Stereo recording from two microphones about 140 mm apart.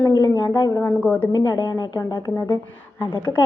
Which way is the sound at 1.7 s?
25° left (ahead or behind).